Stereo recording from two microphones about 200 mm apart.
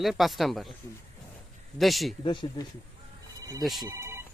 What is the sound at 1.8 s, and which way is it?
Speech, centre (ahead or behind).